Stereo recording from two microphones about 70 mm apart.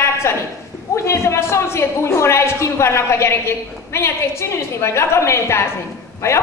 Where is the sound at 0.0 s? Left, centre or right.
Left.